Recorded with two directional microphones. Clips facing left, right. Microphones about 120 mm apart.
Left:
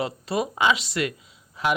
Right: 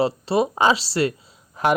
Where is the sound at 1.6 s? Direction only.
45° right (ahead or behind).